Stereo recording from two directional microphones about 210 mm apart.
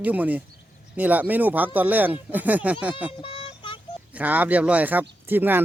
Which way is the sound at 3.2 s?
25° left (ahead or behind).